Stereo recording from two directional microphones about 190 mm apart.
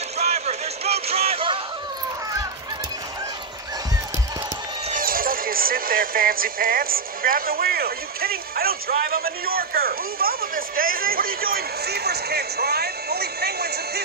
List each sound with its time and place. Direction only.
0.2 s music: 35° right (ahead or behind)
4.9 s speech: 50° right (ahead or behind)